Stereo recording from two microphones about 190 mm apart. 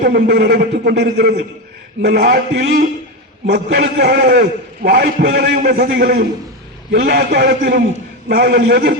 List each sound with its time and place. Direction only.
0.0 s a man's voice: 55° right (ahead or behind)